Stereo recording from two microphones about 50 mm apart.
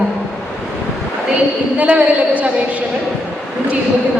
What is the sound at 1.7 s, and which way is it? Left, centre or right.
Speech, right.